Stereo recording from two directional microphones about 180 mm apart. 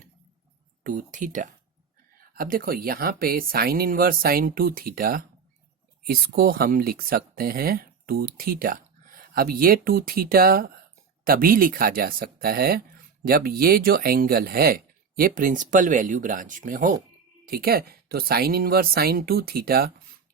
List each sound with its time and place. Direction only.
0.9 s speech: 45° right (ahead or behind)